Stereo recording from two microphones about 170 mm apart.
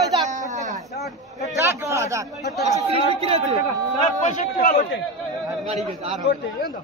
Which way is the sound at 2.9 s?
35° right (ahead or behind).